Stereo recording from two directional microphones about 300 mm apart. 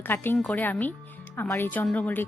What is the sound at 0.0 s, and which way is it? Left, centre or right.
A woman's voice, centre.